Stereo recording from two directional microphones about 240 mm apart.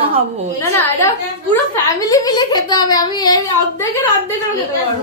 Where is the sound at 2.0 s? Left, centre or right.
Centre.